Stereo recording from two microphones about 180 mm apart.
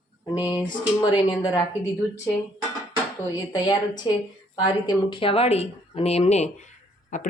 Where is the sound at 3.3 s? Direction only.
25° left (ahead or behind).